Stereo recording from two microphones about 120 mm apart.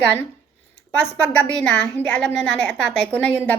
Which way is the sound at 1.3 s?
10° left (ahead or behind).